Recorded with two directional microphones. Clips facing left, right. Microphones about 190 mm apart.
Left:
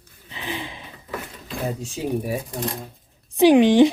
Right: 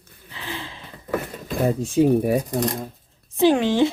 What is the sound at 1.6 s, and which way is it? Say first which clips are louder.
Speech: right 9 dB; 55° right (ahead or behind).